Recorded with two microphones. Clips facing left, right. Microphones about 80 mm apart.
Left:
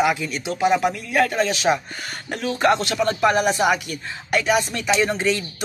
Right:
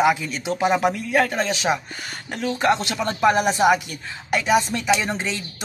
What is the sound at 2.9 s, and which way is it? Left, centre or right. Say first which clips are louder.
Speech: even; centre.